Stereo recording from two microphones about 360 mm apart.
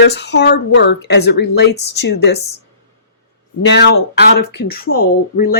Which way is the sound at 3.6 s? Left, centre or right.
Left.